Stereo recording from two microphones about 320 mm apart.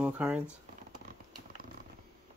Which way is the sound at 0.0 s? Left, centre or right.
Centre.